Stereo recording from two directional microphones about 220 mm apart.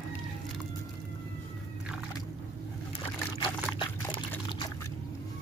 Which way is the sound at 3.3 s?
20° left (ahead or behind).